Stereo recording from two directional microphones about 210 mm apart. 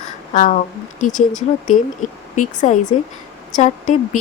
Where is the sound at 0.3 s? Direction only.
40° left (ahead or behind).